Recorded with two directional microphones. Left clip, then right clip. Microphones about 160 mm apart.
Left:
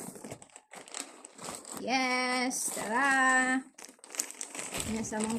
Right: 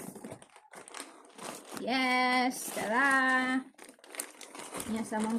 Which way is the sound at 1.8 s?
10° left (ahead or behind).